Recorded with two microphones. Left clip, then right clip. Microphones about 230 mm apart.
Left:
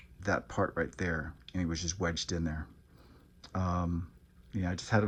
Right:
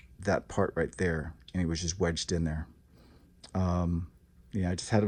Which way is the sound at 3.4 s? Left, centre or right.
Right.